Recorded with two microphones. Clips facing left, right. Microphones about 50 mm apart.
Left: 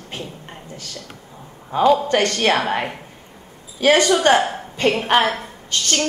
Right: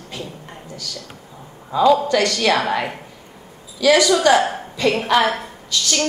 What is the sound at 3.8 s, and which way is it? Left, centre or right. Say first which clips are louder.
A woman's voice: right 1 dB; left.